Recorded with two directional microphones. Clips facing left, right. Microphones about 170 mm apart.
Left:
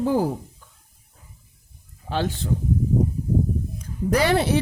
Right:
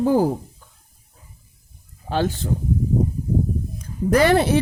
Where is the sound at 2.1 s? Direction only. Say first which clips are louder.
Right 3 dB; 45° right (ahead or behind).